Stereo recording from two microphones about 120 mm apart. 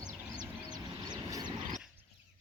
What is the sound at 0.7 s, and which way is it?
Vehicle, 35° right (ahead or behind).